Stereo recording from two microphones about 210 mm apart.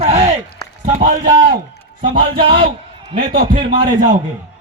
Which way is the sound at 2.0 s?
25° right (ahead or behind).